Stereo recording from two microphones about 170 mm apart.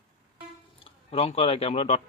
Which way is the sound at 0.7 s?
35° left (ahead or behind).